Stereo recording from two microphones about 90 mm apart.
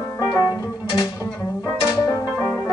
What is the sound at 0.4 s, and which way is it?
Music, 45° left (ahead or behind).